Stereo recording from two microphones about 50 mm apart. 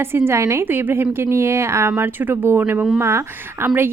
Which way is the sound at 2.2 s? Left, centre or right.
Right.